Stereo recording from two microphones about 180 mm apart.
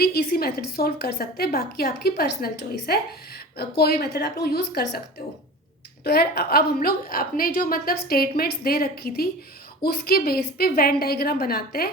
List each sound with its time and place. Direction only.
0.0 s a woman's voice: 60° left (ahead or behind)
6.0 s a woman's voice: 60° left (ahead or behind)